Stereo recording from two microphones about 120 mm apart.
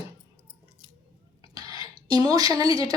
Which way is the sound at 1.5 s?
30° right (ahead or behind).